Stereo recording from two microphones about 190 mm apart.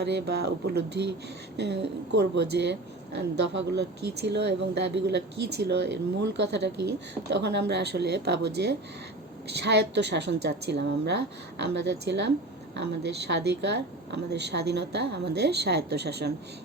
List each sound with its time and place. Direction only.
0.0 s speech: 60° right (ahead or behind)